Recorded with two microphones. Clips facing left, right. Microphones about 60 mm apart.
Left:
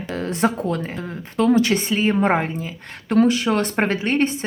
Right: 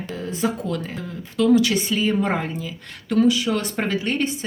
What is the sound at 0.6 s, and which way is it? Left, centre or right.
Speech, left.